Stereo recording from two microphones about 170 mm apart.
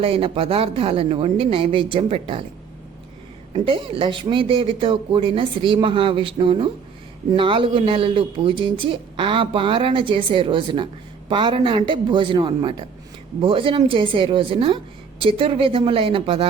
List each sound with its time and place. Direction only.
0.0 s speech: 35° right (ahead or behind)
3.5 s speech: 30° right (ahead or behind)